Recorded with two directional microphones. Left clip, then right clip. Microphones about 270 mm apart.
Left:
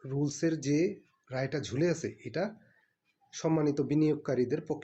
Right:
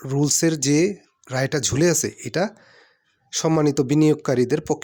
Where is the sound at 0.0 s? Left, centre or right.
Right.